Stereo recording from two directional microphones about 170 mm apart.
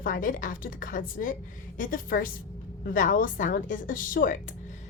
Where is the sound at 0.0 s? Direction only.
50° left (ahead or behind).